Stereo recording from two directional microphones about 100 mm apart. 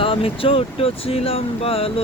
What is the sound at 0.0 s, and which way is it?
Speech, 65° left (ahead or behind).